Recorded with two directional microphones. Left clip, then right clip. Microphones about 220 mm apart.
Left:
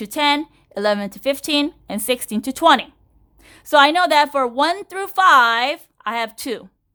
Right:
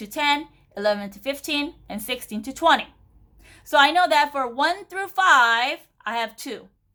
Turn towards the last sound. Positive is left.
turn(degrees=40)  # may be behind; listen again after turning